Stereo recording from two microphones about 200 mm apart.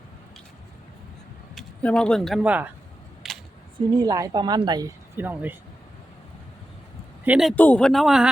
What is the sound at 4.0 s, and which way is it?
Speech, 20° right (ahead or behind).